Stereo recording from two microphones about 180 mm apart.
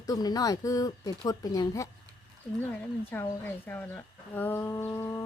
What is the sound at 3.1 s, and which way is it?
Speech, 10° left (ahead or behind).